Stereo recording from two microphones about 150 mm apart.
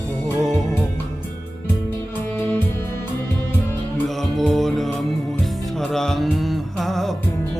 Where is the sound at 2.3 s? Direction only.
10° left (ahead or behind).